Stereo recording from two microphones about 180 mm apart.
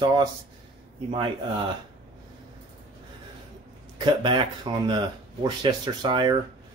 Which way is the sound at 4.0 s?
25° right (ahead or behind).